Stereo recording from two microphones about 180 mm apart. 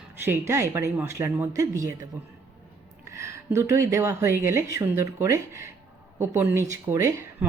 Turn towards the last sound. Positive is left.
turn(degrees=-15)  # may be behind; listen again after turning